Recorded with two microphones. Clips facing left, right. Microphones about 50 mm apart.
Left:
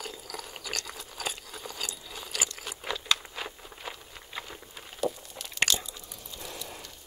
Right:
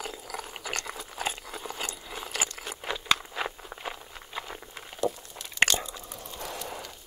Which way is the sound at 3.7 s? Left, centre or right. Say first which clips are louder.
Right 4 dB; right.